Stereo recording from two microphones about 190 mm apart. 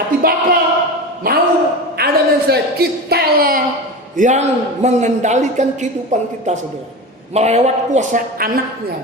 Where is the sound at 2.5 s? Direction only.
55° right (ahead or behind).